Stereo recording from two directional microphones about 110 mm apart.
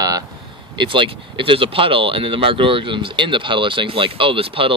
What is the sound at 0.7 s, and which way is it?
Speech, 50° right (ahead or behind).